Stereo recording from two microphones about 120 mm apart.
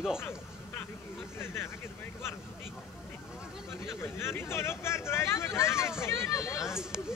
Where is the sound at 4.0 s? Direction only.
20° left (ahead or behind).